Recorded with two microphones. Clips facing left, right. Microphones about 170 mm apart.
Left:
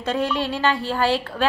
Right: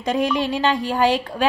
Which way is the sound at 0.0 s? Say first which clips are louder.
Right 3 dB; 15° right (ahead or behind).